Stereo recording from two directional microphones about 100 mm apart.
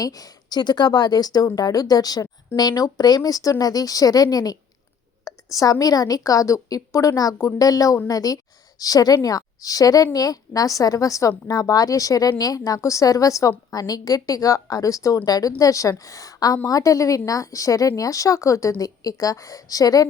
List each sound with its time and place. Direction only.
0.0 s a woman's voice: 40° left (ahead or behind)
5.3 s a sound: 40° left (ahead or behind)
5.8 s a woman's voice: 35° left (ahead or behind)